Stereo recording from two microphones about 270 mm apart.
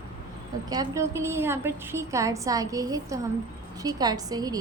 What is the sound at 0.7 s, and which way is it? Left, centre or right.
A woman's voice, centre.